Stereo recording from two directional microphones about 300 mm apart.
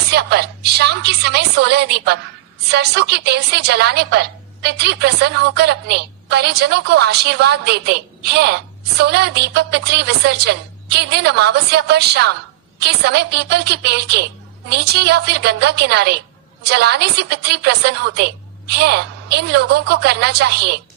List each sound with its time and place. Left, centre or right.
0.1 s a woman's voice: right